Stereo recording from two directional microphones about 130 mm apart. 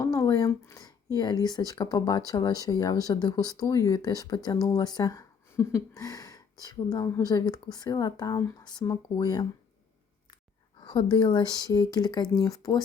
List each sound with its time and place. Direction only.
0.0 s speech: 25° left (ahead or behind)
10.8 s speech: 35° left (ahead or behind)